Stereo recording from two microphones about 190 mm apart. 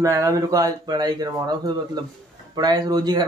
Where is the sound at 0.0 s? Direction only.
15° right (ahead or behind).